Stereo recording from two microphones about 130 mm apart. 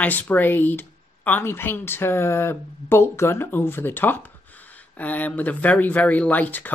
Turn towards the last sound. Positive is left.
turn(degrees=15)  # may be behind; listen again after turning